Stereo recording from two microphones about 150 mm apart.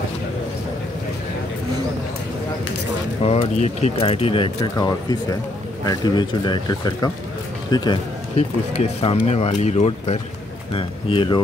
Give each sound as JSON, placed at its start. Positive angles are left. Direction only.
{"t": 3.3, "sound": "speech", "side_deg": 45}
{"t": 4.7, "sound": "speech", "side_deg": 25}
{"t": 8.4, "sound": "speech", "side_deg": 45}